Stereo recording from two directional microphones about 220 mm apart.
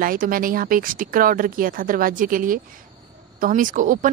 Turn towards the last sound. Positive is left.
turn(degrees=-35)  # may be behind; listen again after turning